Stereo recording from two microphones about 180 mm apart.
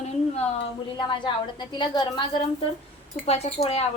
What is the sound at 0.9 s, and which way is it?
A woman's voice, 25° left (ahead or behind).